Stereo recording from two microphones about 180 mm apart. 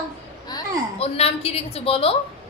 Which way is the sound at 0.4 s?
20° left (ahead or behind).